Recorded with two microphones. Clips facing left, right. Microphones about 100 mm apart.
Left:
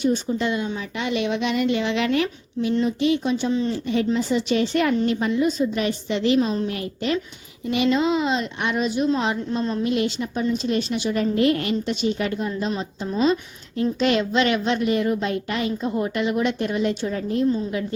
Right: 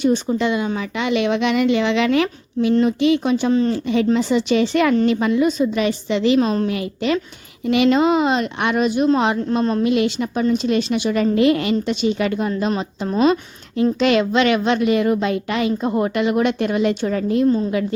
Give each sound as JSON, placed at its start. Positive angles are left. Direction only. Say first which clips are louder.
{"t": 0.0, "sound": "speech", "louder": "right 4 dB", "side_deg": -80}
{"t": 2.8, "sound": "a woman's voice", "louder": "right 4 dB", "side_deg": -80}
{"t": 3.7, "sound": "speech", "louder": "right 5 dB", "side_deg": -85}
{"t": 7.6, "sound": "a woman's voice", "louder": "right 5 dB", "side_deg": -70}
{"t": 10.5, "sound": "a woman's voice", "louder": "right 5 dB", "side_deg": -75}
{"t": 14.0, "sound": "a woman's voice", "louder": "right 3 dB", "side_deg": -90}